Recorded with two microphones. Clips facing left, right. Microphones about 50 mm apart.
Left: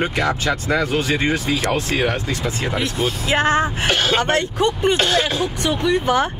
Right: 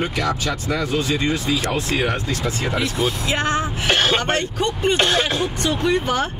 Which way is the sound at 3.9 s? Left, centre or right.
Centre.